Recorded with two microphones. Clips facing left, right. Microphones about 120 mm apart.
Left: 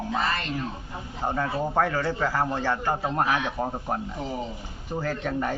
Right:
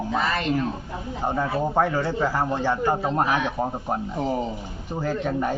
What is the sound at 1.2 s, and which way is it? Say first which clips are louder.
A man's voice: right 2 dB; 15° right (ahead or behind).